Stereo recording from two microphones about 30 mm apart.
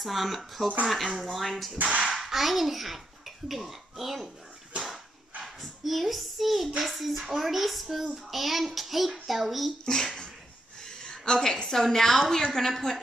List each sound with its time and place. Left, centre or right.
0.0 s a child's voice: centre
1.8 s speech: right
2.0 s a child's voice: centre
5.4 s a child's voice: centre
9.9 s speech: left
10.9 s a sound: left
11.3 s a woman's voice: centre